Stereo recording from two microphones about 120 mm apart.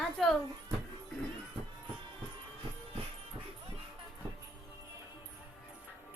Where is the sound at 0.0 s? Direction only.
5° left (ahead or behind).